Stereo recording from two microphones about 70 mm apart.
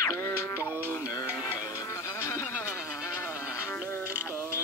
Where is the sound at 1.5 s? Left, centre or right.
Left.